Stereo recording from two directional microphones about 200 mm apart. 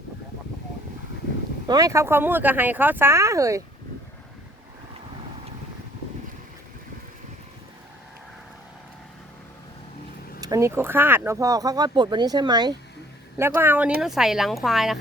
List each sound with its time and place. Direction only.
1.6 s speech: 20° right (ahead or behind)
10.4 s speech: 15° right (ahead or behind)